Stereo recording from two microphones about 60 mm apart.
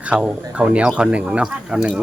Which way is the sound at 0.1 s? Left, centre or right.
Centre.